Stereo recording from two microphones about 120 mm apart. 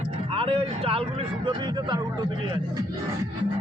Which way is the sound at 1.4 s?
40° right (ahead or behind).